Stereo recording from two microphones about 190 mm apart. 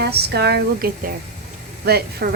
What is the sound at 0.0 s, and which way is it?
A woman's voice, 60° right (ahead or behind).